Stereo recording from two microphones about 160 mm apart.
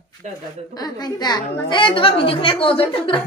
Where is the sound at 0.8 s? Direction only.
25° left (ahead or behind).